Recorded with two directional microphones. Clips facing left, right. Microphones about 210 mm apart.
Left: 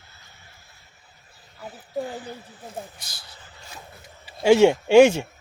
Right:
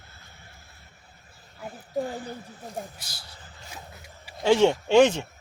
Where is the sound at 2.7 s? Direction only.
5° right (ahead or behind).